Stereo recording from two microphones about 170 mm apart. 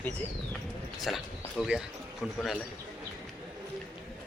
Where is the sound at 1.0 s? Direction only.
Centre (ahead or behind).